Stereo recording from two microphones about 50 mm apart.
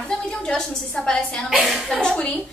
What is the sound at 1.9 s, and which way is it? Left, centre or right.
Speech, centre.